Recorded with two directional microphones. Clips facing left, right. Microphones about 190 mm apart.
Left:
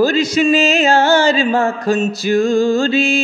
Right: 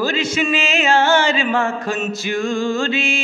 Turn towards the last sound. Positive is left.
turn(degrees=35)  # may be behind; listen again after turning